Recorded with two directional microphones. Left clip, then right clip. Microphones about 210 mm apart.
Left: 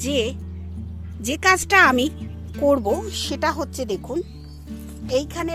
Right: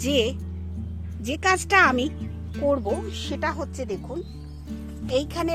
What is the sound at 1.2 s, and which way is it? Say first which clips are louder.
Speech: left 4 dB; 15° left (ahead or behind).